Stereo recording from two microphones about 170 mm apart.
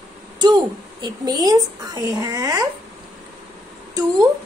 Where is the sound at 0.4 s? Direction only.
25° right (ahead or behind).